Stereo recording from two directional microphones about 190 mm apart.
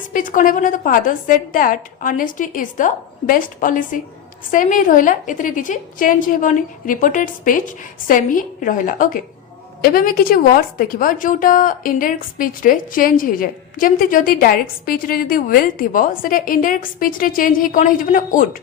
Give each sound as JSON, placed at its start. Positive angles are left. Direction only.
{"t": 0.0, "sound": "a woman's voice", "side_deg": 45}